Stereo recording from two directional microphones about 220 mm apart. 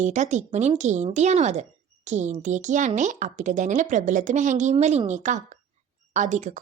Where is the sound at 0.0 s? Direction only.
30° right (ahead or behind).